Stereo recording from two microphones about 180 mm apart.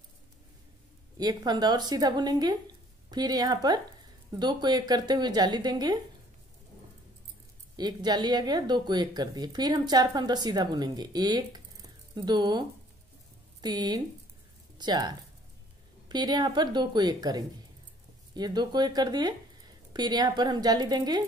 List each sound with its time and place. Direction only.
1.1 s speech: 20° right (ahead or behind)
7.7 s speech: 20° right (ahead or behind)